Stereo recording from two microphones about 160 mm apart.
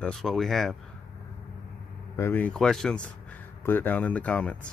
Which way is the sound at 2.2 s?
10° left (ahead or behind).